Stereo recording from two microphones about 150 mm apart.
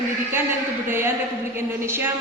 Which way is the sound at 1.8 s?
15° right (ahead or behind).